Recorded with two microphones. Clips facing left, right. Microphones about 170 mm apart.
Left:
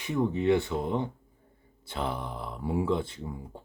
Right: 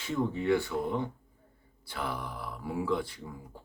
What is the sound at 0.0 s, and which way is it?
Speech, 15° left (ahead or behind).